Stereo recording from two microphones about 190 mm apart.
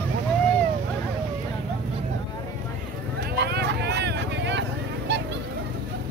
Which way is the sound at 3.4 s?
60° right (ahead or behind).